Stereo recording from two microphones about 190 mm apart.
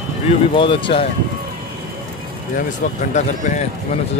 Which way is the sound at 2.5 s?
40° left (ahead or behind).